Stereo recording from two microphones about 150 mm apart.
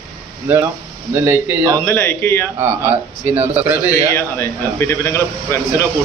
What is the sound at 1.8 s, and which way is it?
Speech, 15° left (ahead or behind).